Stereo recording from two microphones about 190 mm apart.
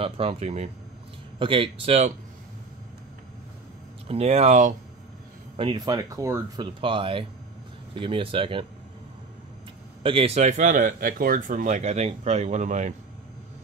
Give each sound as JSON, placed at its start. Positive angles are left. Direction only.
{"t": 0.0, "sound": "speech", "side_deg": -30}
{"t": 4.1, "sound": "speech", "side_deg": -35}
{"t": 5.6, "sound": "speech", "side_deg": -25}
{"t": 10.0, "sound": "speech", "side_deg": -30}